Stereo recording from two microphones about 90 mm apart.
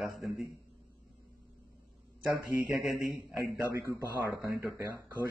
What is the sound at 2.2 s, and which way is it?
Speech, 20° right (ahead or behind).